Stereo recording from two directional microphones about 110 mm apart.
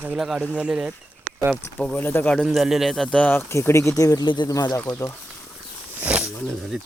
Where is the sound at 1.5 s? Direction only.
15° left (ahead or behind).